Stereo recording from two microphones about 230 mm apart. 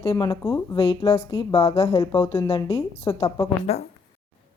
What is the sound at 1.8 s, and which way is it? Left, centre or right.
A woman's voice, centre.